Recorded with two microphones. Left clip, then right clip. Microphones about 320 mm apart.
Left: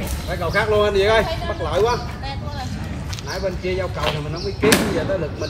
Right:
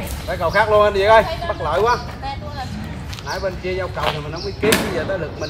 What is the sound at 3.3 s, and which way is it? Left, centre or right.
Speech, centre.